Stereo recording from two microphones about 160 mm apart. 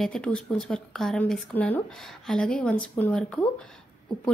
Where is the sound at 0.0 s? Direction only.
5° left (ahead or behind).